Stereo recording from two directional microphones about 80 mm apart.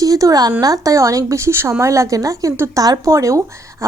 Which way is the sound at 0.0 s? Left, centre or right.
Right.